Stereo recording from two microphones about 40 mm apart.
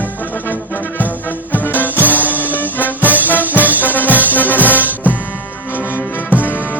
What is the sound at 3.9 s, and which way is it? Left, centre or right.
Music, left.